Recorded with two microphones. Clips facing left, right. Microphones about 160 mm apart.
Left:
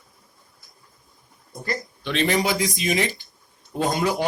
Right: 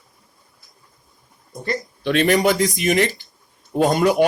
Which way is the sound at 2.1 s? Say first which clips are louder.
Right 6 dB; 55° right (ahead or behind).